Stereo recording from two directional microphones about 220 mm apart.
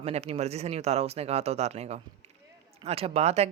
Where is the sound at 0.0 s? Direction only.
30° right (ahead or behind).